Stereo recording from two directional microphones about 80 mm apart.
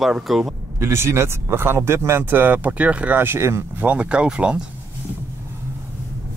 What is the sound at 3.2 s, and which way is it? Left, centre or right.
Speech, right.